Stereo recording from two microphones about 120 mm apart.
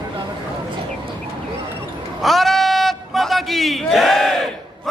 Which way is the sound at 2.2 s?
Centre (ahead or behind).